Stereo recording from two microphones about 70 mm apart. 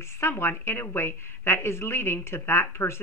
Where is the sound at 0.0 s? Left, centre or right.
Left.